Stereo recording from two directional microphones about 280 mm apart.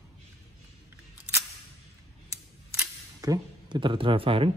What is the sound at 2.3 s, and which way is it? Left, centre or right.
Camera, centre.